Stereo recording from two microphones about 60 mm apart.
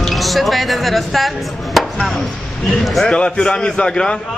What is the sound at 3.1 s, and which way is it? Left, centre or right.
A man's voice, centre.